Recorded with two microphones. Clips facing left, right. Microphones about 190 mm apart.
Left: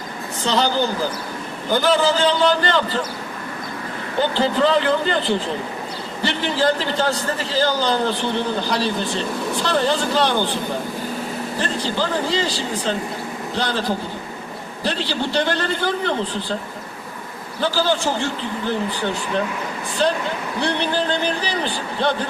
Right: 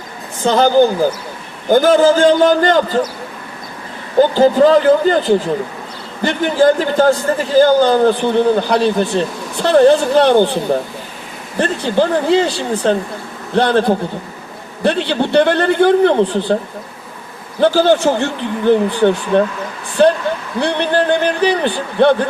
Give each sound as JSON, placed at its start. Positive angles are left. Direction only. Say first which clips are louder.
{"t": 0.4, "sound": "a man's voice", "louder": "right 9 dB", "side_deg": -50}
{"t": 4.2, "sound": "a man's voice", "louder": "right 9 dB", "side_deg": -45}
{"t": 11.6, "sound": "speech", "louder": "right 10 dB", "side_deg": -55}
{"t": 17.6, "sound": "speech", "louder": "right 9 dB", "side_deg": -60}
{"t": 20.6, "sound": "a man's voice", "louder": "right 6 dB", "side_deg": -55}